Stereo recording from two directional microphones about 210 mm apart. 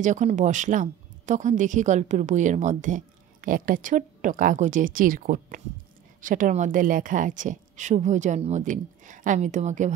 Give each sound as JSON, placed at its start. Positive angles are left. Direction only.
{"t": 0.0, "sound": "speech", "side_deg": -35}